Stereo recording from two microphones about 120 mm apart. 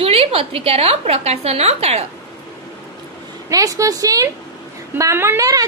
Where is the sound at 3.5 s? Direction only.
30° right (ahead or behind).